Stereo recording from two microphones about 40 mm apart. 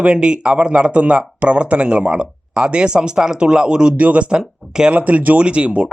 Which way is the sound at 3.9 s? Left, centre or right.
Right.